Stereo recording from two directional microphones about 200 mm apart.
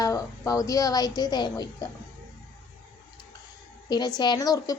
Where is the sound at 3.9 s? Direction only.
20° left (ahead or behind).